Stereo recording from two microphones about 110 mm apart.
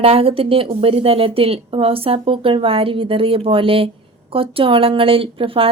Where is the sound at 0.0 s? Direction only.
60° right (ahead or behind).